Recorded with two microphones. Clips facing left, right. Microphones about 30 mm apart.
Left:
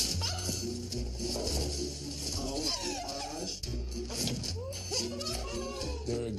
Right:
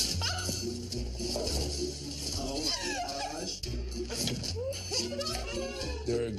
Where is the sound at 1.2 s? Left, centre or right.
Centre.